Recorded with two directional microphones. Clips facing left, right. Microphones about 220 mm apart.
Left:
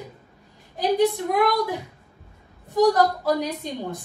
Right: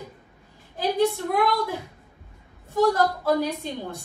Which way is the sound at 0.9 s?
15° left (ahead or behind).